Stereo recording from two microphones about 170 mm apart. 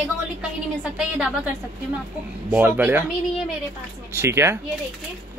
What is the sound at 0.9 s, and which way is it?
Speech, 5° right (ahead or behind).